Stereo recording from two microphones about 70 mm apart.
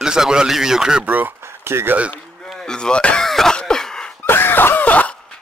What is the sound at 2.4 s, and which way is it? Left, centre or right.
Speech, centre.